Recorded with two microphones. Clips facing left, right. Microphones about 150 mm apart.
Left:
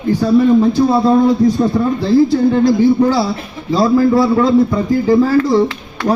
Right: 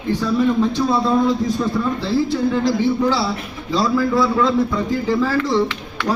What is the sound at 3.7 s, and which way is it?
A man's voice, 45° left (ahead or behind).